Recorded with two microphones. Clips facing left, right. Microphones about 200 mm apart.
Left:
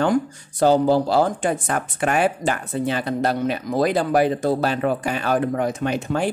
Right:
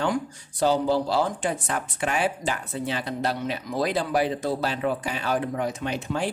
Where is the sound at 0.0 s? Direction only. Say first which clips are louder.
Left 6 dB; 50° left (ahead or behind).